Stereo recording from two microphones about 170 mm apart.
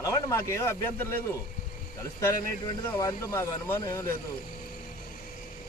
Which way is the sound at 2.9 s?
20° left (ahead or behind).